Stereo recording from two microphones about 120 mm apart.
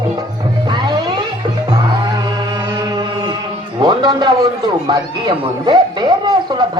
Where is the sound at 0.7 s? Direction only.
40° right (ahead or behind).